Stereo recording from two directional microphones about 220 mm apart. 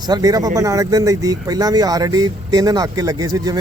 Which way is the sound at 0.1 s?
15° right (ahead or behind).